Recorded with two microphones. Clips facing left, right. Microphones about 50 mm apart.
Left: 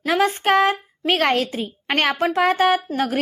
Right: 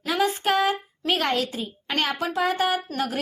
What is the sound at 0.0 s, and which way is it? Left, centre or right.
A woman's voice, left.